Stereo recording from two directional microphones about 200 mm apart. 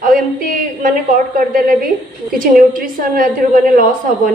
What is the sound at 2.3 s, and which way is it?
Speech, 45° right (ahead or behind).